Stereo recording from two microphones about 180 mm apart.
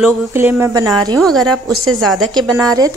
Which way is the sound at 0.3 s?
15° right (ahead or behind).